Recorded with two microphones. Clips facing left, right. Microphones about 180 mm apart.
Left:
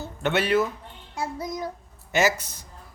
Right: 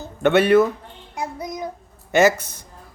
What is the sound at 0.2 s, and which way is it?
Speech, 55° right (ahead or behind).